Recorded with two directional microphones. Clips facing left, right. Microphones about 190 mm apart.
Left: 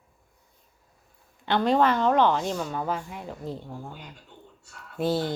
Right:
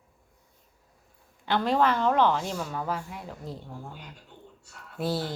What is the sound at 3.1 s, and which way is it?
Speech, 25° left (ahead or behind).